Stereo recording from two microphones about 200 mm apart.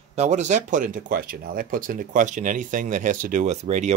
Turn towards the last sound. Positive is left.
turn(degrees=-35)  # may be behind; listen again after turning